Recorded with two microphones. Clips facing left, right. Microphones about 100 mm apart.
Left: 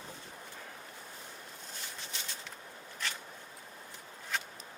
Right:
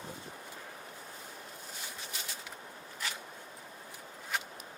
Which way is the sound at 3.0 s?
5° right (ahead or behind).